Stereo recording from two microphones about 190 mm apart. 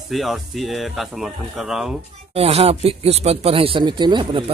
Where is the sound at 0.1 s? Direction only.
Centre (ahead or behind).